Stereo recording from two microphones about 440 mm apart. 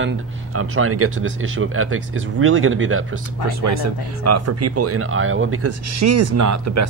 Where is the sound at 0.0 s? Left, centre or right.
Right.